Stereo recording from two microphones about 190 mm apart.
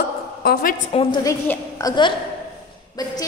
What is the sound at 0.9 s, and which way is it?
Speech, 30° left (ahead or behind).